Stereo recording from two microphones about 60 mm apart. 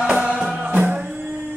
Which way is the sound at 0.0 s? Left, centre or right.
Centre.